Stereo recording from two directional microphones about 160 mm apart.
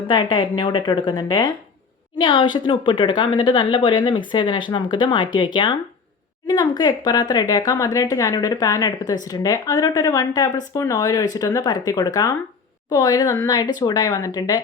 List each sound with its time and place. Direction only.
0.1 s speech: 30° left (ahead or behind)
6.5 s speech: 25° left (ahead or behind)